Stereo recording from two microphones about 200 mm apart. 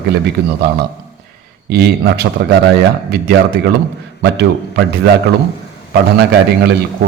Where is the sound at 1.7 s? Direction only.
55° right (ahead or behind).